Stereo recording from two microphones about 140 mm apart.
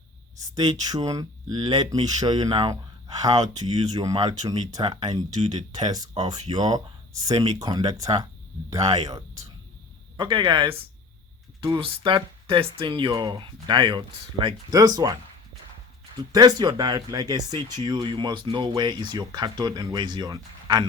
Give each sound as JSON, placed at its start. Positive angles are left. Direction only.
{"t": 0.4, "sound": "speech", "side_deg": -30}
{"t": 5.3, "sound": "speech", "side_deg": -55}
{"t": 6.3, "sound": "speech", "side_deg": -30}
{"t": 16.3, "sound": "speech", "side_deg": -30}